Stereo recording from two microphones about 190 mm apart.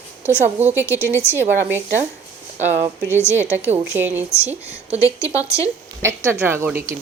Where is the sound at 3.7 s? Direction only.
10° right (ahead or behind).